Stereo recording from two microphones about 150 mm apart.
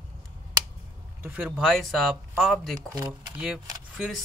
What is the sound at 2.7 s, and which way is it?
Speech, 25° right (ahead or behind).